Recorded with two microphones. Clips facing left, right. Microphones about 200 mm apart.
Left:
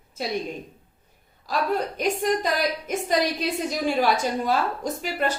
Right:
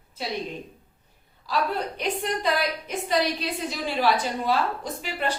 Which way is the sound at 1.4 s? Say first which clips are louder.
Left 2 dB; 45° left (ahead or behind).